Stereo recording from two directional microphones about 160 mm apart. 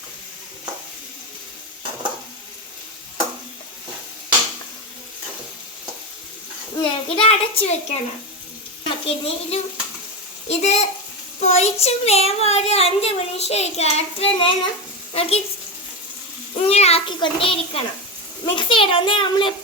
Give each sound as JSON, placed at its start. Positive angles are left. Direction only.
{"t": 6.8, "sound": "a child's voice", "side_deg": 35}
{"t": 16.6, "sound": "speech", "side_deg": 40}